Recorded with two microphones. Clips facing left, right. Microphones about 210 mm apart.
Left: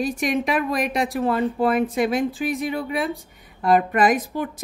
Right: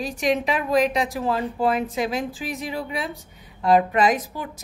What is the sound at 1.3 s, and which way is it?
A woman's voice, 55° left (ahead or behind).